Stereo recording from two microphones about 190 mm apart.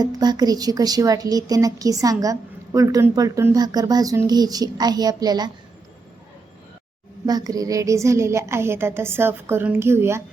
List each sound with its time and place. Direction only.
0.0 s speech: 20° right (ahead or behind)
7.3 s a woman's voice: 20° right (ahead or behind)